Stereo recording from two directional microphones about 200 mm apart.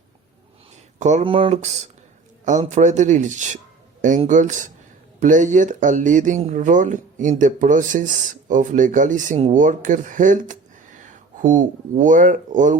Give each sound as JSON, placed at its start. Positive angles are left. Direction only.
{"t": 0.9, "sound": "speech", "side_deg": -35}